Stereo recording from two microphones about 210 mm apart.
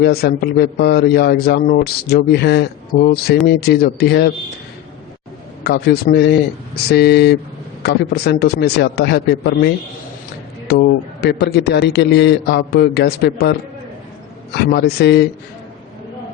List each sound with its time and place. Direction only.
0.0 s a man's voice: 50° left (ahead or behind)
5.6 s a man's voice: 45° left (ahead or behind)